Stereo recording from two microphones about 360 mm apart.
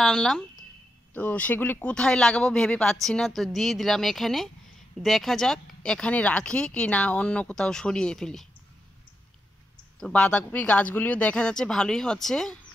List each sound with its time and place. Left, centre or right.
0.0 s speech: centre
9.9 s speech: centre